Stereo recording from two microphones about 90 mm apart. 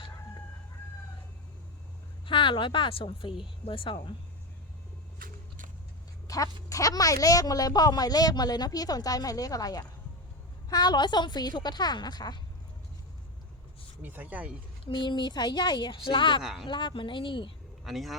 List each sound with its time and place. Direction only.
2.2 s a woman's voice: 70° left (ahead or behind)
6.2 s speech: 40° left (ahead or behind)
14.0 s speech: 20° right (ahead or behind)
14.8 s speech: 60° left (ahead or behind)
16.4 s speech: 5° right (ahead or behind)
16.6 s a woman's voice: 65° left (ahead or behind)
17.8 s speech: centre (ahead or behind)